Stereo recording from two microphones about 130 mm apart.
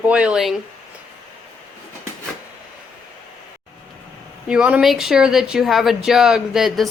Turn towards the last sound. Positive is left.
turn(degrees=0)  # may be behind; listen again after turning